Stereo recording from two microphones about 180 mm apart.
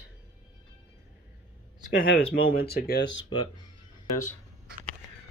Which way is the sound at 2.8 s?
75° left (ahead or behind).